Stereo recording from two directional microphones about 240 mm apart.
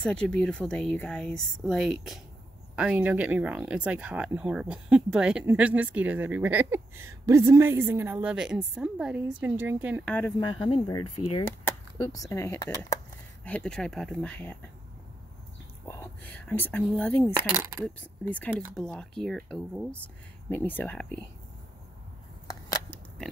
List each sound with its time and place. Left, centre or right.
0.0 s a woman's voice: centre
10.0 s speech: centre
15.8 s speech: centre
22.5 s scissors: centre